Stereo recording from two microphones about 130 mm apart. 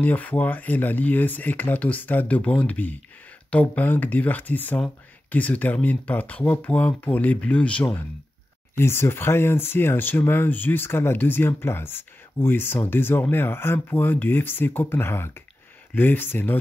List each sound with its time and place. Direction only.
0.0 s speech: 10° left (ahead or behind)